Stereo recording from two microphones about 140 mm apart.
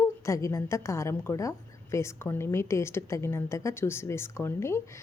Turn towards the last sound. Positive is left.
turn(degrees=20)  # may be behind; listen again after turning